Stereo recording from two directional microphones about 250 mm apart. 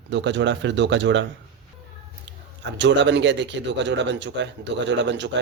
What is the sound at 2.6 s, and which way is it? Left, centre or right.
Speech, right.